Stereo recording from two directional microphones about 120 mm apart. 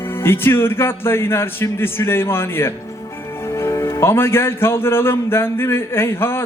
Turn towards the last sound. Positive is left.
turn(degrees=20)  # may be behind; listen again after turning